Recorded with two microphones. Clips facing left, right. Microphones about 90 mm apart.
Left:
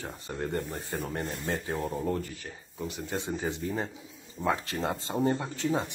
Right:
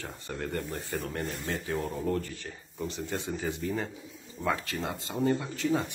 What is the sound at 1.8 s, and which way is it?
A man's voice, 5° left (ahead or behind).